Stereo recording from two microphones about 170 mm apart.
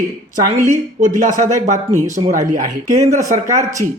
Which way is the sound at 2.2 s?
30° right (ahead or behind).